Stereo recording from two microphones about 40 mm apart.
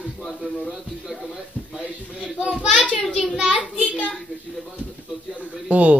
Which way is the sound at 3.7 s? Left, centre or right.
Left.